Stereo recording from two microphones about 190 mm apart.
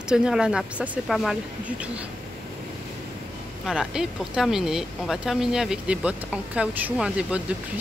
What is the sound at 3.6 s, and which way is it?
Speech, 5° right (ahead or behind).